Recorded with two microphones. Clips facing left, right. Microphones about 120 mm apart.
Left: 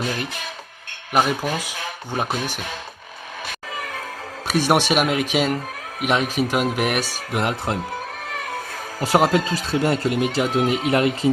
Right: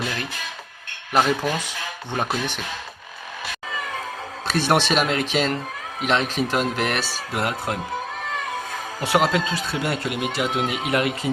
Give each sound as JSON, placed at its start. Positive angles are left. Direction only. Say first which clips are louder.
{"t": 1.1, "sound": "speech", "louder": "even", "side_deg": 10}
{"t": 4.4, "sound": "speech", "louder": "left 2 dB", "side_deg": 10}
{"t": 9.0, "sound": "speech", "louder": "left 3 dB", "side_deg": 35}